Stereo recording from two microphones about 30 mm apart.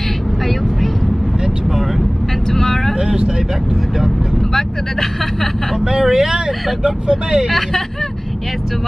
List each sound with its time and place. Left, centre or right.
2.5 s vehicle: centre
6.0 s vehicle: centre
6.3 s speech: right